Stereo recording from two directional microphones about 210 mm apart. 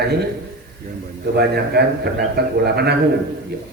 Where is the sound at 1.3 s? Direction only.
50° right (ahead or behind).